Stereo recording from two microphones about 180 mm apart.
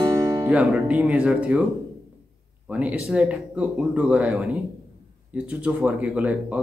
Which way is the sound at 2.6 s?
10° right (ahead or behind).